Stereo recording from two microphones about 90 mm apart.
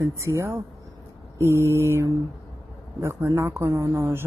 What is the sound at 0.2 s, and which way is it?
Speech, 35° right (ahead or behind).